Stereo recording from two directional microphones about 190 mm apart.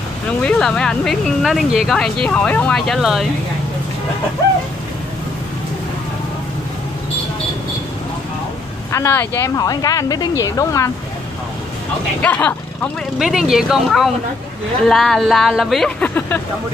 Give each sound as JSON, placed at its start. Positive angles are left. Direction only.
{"t": 0.4, "sound": "speech", "side_deg": 5}
{"t": 8.9, "sound": "speech", "side_deg": 15}
{"t": 12.2, "sound": "speech", "side_deg": 5}